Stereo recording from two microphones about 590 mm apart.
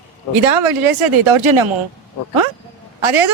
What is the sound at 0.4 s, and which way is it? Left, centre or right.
Speech, right.